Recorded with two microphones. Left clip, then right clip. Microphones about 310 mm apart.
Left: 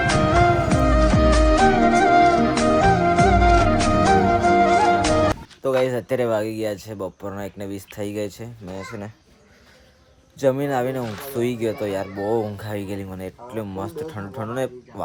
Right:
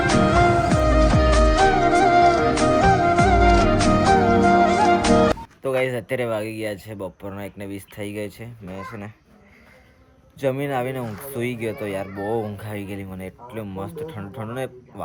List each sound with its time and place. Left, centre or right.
0.1 s music: centre
5.6 s speech: centre
10.4 s speech: centre